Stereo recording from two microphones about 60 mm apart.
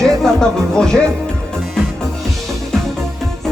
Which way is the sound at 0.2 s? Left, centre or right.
Centre.